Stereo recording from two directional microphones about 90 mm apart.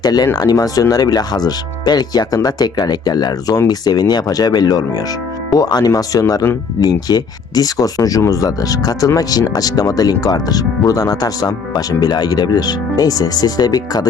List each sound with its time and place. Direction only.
0.0 s speech: 50° left (ahead or behind)